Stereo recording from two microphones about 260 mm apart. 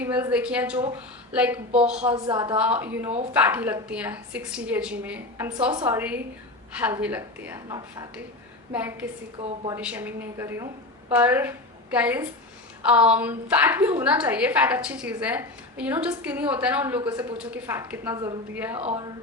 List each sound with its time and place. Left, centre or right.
0.0 s a woman's voice: centre
2.1 s a woman's voice: centre
2.6 s a woman's voice: centre
18.8 s speech: right